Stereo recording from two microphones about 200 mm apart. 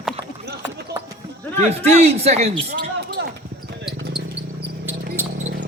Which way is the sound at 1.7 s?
30° right (ahead or behind).